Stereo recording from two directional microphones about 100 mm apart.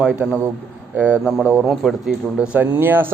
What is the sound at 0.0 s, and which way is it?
A man's voice, 10° right (ahead or behind).